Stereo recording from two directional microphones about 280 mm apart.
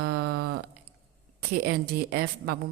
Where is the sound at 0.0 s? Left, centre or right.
Right.